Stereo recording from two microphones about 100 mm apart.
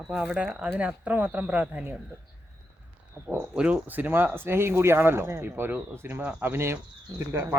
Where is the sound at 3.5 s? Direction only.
10° right (ahead or behind).